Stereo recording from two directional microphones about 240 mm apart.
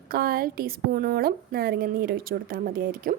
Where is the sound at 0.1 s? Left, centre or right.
Right.